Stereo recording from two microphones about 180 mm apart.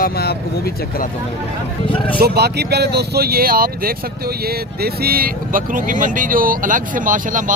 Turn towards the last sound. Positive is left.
turn(degrees=-45)  # may be behind; listen again after turning